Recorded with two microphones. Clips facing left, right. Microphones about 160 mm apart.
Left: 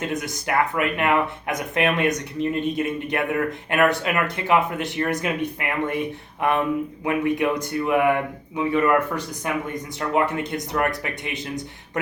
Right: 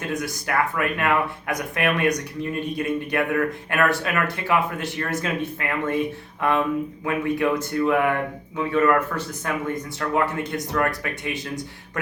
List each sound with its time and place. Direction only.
0.1 s speech: 20° left (ahead or behind)